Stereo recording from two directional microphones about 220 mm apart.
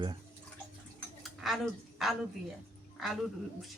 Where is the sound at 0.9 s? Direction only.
Centre (ahead or behind).